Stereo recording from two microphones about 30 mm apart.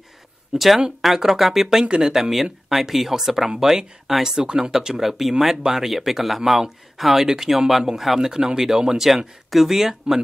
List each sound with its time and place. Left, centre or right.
0.5 s speech: centre
8.3 s speech: centre